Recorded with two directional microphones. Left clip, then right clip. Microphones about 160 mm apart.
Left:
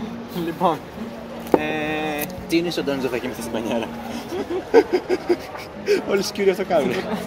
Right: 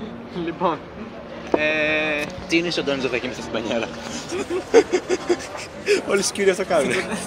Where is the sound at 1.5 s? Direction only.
40° left (ahead or behind).